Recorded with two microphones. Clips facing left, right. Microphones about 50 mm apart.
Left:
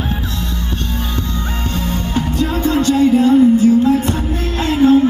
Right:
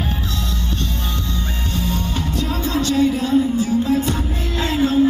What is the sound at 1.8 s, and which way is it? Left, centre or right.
Music, left.